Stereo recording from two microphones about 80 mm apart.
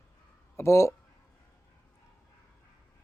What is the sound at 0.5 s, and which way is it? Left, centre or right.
Speech, left.